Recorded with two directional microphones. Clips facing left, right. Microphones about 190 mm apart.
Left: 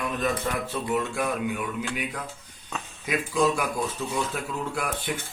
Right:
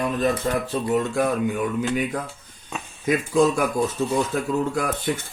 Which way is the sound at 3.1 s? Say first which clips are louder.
Right 5 dB; 45° right (ahead or behind).